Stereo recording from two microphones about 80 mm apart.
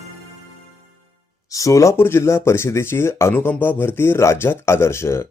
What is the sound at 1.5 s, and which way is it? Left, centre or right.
Speech, left.